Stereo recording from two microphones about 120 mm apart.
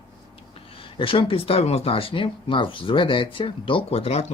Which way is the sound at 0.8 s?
45° left (ahead or behind).